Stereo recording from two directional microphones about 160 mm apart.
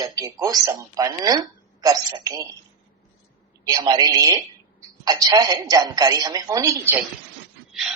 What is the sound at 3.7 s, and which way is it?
A woman's voice, 25° right (ahead or behind).